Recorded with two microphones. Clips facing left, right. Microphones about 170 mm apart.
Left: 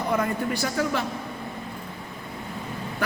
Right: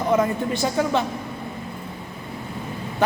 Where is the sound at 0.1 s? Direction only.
20° right (ahead or behind).